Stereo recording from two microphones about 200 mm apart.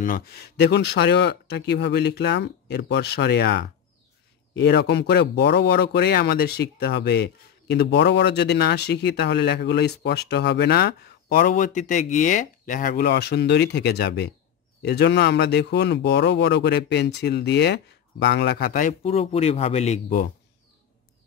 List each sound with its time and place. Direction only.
0.0 s speech: 50° left (ahead or behind); by 20.2 s 30° left (ahead or behind)